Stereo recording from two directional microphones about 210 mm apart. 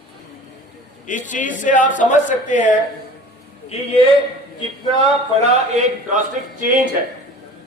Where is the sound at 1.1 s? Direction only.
35° left (ahead or behind).